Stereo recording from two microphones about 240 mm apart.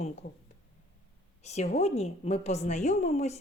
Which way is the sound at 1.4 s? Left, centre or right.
Left.